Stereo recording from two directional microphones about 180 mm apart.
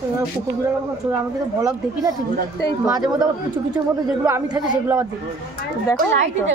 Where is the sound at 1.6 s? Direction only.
20° right (ahead or behind).